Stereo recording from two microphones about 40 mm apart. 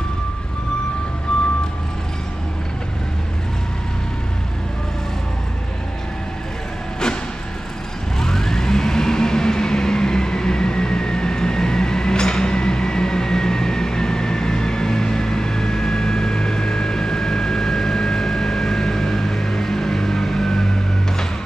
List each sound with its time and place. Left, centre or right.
1.3 s vehicle: left
8.2 s vehicle: centre